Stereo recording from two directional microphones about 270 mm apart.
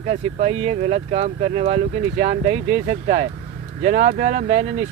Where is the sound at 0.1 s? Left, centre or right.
Right.